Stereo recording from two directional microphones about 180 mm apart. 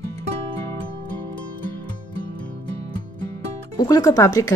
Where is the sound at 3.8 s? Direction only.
20° left (ahead or behind).